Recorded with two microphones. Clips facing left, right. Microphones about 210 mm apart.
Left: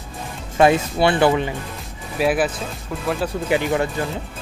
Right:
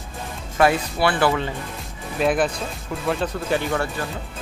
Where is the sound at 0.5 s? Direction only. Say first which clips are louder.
Left 3 dB; 20° left (ahead or behind).